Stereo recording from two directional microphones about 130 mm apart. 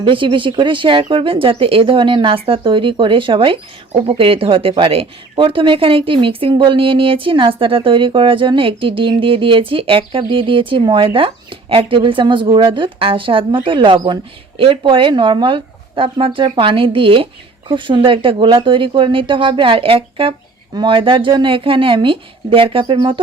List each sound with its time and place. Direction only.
0.0 s speech: 40° right (ahead or behind)